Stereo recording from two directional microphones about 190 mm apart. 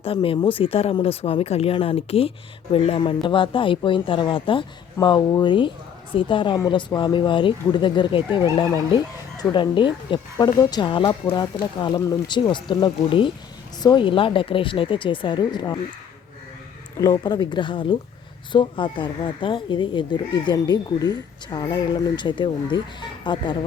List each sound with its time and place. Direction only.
0.0 s a woman's voice: 30° left (ahead or behind)
17.0 s a woman's voice: 20° left (ahead or behind)